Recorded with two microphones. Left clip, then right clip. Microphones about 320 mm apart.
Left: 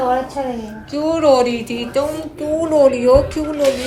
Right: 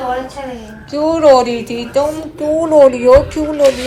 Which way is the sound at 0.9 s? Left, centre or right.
Centre.